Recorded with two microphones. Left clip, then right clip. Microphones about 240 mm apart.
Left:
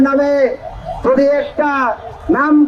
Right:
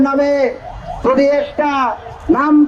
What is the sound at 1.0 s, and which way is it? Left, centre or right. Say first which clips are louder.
Speech: even; right.